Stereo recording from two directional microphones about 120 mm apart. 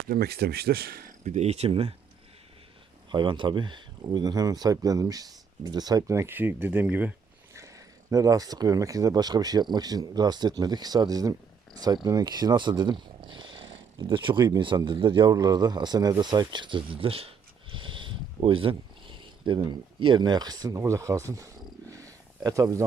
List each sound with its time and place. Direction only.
1.2 s speech: 70° right (ahead or behind); by 2.0 s 55° right (ahead or behind)
3.1 s speech: 40° right (ahead or behind); by 7.1 s 15° right (ahead or behind)
8.1 s speech: 30° right (ahead or behind)